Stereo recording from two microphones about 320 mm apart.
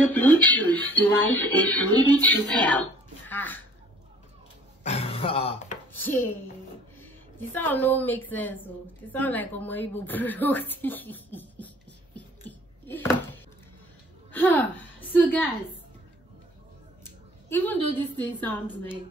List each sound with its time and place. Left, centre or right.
0.1 s speech: centre
4.8 s speech: centre
5.9 s a woman's voice: centre
17.0 s a woman's voice: centre